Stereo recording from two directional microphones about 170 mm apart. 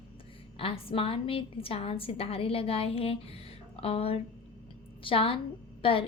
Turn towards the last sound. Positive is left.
turn(degrees=30)  # may be behind; listen again after turning